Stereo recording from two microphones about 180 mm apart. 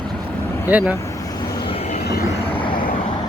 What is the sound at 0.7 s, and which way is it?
Speech, 10° right (ahead or behind).